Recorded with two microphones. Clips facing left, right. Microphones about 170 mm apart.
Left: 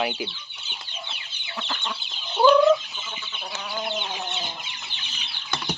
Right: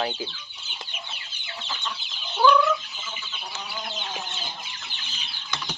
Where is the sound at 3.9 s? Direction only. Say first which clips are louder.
Left 4 dB; 65° left (ahead or behind).